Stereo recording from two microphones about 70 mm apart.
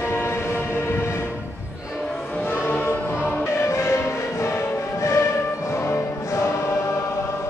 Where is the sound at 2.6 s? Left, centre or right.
Left.